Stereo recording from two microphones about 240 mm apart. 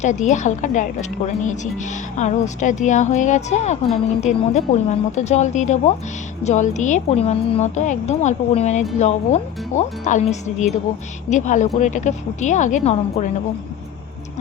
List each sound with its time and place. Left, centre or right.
0.0 s a woman's voice: left